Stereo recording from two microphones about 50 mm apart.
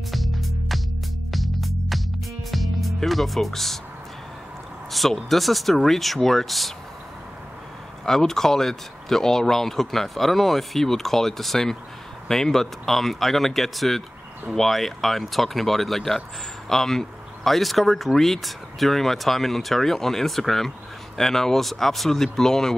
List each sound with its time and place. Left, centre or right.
0.1 s music: centre
2.5 s speech: centre
4.9 s speech: centre
8.0 s speech: centre